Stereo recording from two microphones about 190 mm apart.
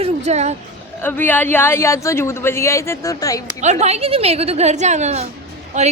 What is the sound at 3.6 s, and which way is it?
A woman's voice, 35° right (ahead or behind).